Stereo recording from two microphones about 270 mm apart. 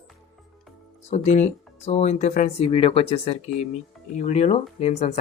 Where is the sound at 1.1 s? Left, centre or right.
Left.